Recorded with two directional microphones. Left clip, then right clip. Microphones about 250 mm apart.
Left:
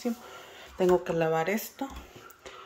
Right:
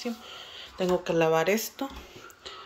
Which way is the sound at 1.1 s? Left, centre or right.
Centre.